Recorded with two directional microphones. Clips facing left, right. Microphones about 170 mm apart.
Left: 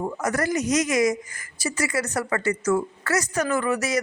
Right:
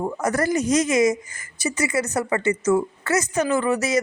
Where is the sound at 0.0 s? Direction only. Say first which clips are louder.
Right 3 dB; 30° right (ahead or behind).